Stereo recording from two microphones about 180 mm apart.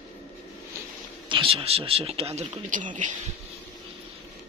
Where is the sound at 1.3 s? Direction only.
30° right (ahead or behind).